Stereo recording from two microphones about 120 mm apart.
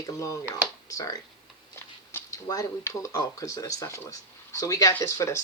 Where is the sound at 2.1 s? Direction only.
20° left (ahead or behind).